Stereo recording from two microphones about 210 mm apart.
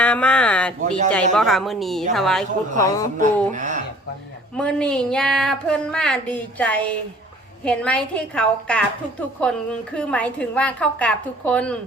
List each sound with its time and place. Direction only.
0.0 s a sound: 5° left (ahead or behind)
0.8 s speech: 35° right (ahead or behind)
1.1 s a woman's voice: centre (ahead or behind)
2.7 s speech: 15° left (ahead or behind)
3.5 s speech: 35° right (ahead or behind)
4.5 s a woman's voice: 5° left (ahead or behind)